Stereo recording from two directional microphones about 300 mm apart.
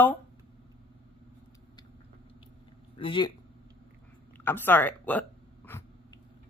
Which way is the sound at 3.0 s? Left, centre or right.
Centre.